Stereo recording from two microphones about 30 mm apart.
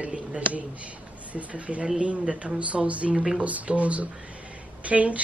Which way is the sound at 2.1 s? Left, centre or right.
Right.